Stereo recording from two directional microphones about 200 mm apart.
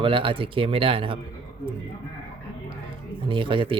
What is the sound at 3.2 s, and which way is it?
Speech, 25° right (ahead or behind).